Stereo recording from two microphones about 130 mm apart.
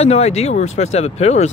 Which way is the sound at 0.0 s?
55° left (ahead or behind).